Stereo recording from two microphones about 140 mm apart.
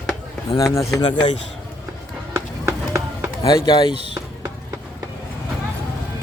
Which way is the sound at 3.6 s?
35° left (ahead or behind).